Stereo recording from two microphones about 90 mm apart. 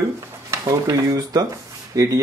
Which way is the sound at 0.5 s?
40° right (ahead or behind).